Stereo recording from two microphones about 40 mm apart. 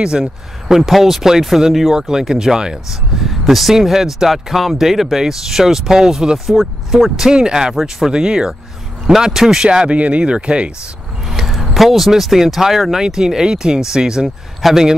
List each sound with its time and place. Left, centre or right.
0.0 s speech: centre
9.7 s speech: right
11.2 s speech: centre